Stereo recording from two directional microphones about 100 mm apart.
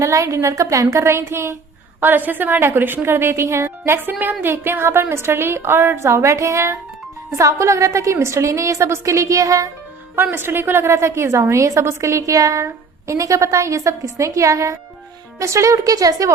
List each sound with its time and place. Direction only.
0.0 s a woman's voice: 30° right (ahead or behind)
10.3 s a woman's voice: 20° right (ahead or behind); by 16.3 s 40° right (ahead or behind)